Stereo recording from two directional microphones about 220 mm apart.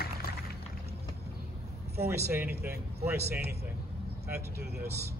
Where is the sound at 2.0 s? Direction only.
10° right (ahead or behind).